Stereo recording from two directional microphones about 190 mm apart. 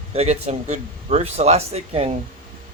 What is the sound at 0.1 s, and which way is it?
Speech, 35° right (ahead or behind).